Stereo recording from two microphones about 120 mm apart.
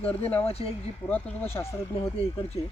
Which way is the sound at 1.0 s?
15° left (ahead or behind).